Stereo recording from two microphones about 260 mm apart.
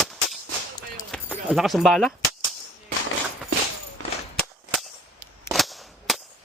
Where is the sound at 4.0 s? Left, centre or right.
Right.